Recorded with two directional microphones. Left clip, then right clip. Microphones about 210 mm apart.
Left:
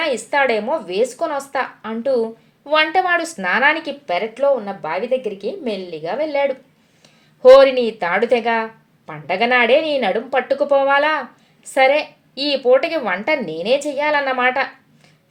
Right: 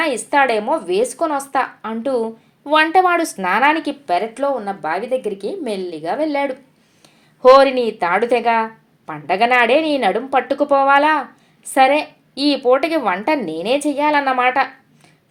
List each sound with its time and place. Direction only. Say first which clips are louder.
0.0 s a woman's voice: right 2 dB; 25° right (ahead or behind)